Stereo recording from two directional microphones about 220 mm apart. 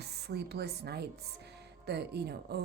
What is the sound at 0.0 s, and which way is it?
A woman's voice, 45° right (ahead or behind).